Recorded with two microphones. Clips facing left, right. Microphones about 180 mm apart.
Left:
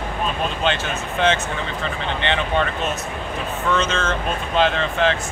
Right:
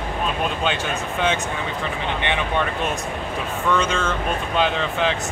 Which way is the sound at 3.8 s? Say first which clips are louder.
Even; 10° right (ahead or behind).